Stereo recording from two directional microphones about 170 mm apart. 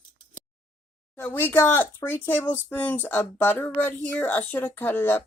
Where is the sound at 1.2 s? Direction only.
10° left (ahead or behind).